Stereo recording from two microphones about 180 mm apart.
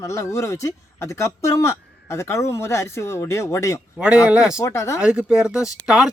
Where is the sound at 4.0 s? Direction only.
5° right (ahead or behind).